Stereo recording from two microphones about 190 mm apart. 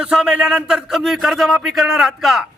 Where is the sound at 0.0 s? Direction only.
5° right (ahead or behind).